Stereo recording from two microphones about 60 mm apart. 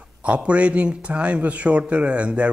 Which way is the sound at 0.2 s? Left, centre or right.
Right.